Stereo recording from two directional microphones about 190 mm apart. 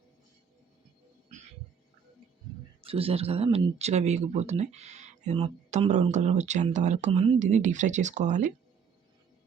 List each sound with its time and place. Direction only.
2.8 s speech: 30° right (ahead or behind)